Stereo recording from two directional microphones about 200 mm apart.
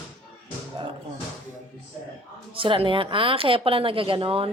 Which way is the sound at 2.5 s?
25° right (ahead or behind).